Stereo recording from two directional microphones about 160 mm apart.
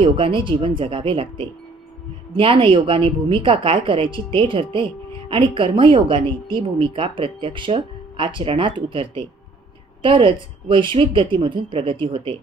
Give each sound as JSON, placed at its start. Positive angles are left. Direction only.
{"t": 0.0, "sound": "a woman's voice", "side_deg": -35}